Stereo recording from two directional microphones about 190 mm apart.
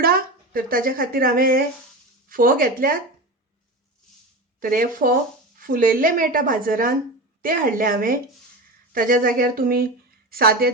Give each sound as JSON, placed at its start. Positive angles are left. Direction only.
{"t": 0.0, "sound": "a woman's voice", "side_deg": -50}
{"t": 4.6, "sound": "a woman's voice", "side_deg": -45}